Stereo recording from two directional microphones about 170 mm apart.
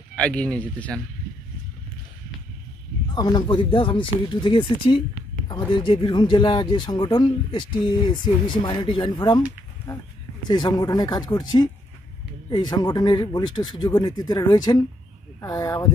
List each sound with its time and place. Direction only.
0.2 s speech: 5° left (ahead or behind)
3.2 s speech: 25° left (ahead or behind)
10.5 s speech: 25° left (ahead or behind)